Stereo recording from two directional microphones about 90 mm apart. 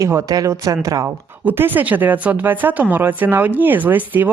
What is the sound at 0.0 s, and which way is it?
Speech, 40° right (ahead or behind).